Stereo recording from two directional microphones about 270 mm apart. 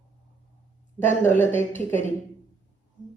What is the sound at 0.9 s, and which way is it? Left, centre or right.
Speech, centre.